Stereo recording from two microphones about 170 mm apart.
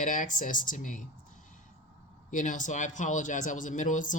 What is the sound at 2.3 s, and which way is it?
Speech, 50° left (ahead or behind).